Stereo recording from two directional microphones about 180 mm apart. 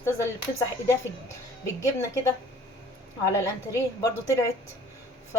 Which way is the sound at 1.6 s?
15° left (ahead or behind).